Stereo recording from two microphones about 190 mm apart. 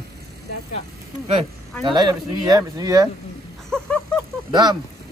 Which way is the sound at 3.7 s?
5° left (ahead or behind).